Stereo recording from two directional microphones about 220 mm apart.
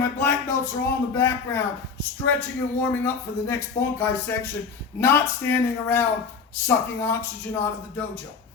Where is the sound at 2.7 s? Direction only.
10° left (ahead or behind).